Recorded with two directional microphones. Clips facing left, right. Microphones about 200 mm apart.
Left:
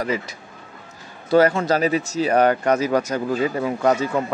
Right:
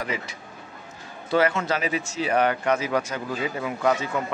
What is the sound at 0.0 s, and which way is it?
Speech, 40° left (ahead or behind).